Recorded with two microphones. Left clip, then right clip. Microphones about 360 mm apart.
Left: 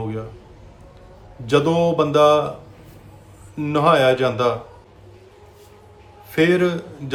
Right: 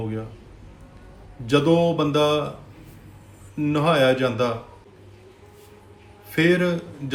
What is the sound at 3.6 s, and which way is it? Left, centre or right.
Speech, centre.